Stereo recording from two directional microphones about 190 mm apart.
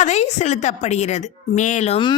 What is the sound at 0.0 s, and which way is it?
A woman's voice, 35° left (ahead or behind).